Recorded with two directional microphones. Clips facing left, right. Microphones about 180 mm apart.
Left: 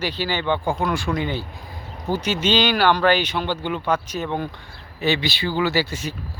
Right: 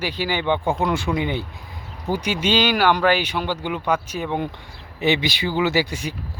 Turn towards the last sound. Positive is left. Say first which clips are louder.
# right 1 dB
turn(degrees=-15)  # may be behind; listen again after turning